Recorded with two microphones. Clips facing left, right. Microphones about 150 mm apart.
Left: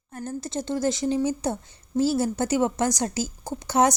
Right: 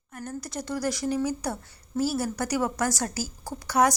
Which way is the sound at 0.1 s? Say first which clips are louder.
Left 4 dB; 30° left (ahead or behind).